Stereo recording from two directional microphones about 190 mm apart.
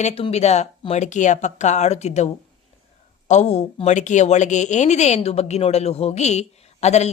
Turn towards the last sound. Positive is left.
turn(degrees=35)  # may be behind; listen again after turning